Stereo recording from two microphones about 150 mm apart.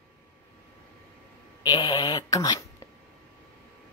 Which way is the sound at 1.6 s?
30° left (ahead or behind).